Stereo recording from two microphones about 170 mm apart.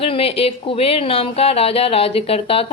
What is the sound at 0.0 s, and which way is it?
Speech, 35° left (ahead or behind).